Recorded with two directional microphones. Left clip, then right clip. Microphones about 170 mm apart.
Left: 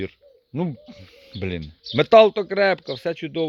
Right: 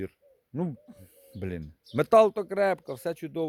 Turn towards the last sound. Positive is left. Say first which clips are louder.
# left 7 dB
turn(degrees=-20)  # may be behind; listen again after turning